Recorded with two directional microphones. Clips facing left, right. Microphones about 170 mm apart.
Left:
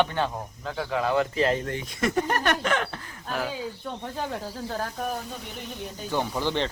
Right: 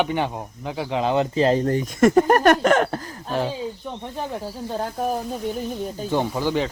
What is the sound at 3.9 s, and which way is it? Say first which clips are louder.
Speech: right 2 dB; 15° right (ahead or behind).